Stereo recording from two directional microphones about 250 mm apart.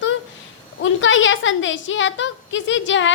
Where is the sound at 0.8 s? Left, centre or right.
Left.